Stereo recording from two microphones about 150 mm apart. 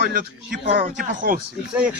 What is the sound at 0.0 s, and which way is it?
Speech, 65° right (ahead or behind).